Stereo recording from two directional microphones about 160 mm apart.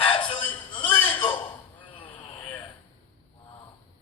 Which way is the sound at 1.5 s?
30° left (ahead or behind).